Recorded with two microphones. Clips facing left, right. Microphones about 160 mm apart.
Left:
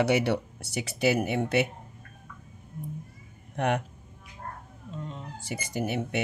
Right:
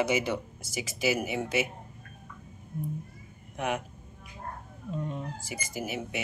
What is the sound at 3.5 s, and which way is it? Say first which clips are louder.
Speech: left 4 dB; 60° left (ahead or behind).